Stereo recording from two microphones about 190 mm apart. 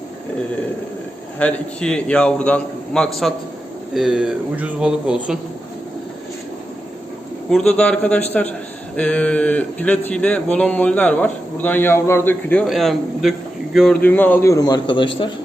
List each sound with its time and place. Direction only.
1.4 s a man's voice: 5° left (ahead or behind)
7.8 s speech: 5° left (ahead or behind); by 15.3 s 25° left (ahead or behind)